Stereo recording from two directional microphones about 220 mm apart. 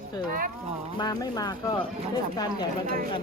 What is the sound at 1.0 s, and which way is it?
Speech, 15° left (ahead or behind).